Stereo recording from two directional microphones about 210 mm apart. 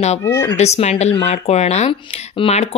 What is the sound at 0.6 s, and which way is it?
Speech, 30° left (ahead or behind).